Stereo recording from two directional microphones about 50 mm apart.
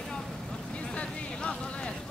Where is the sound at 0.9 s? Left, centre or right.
Left.